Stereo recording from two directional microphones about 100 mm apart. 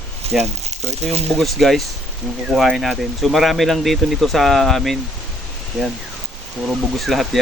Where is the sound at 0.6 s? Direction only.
90° right.